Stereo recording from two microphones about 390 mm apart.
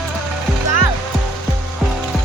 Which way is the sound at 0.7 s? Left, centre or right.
Left.